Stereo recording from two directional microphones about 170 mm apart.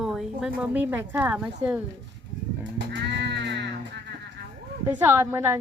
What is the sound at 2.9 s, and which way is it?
Music, 90° right.